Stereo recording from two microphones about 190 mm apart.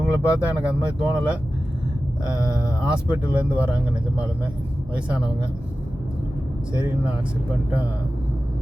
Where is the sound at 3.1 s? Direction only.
5° right (ahead or behind).